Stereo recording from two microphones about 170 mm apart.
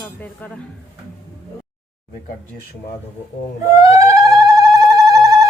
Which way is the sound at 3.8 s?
20° right (ahead or behind).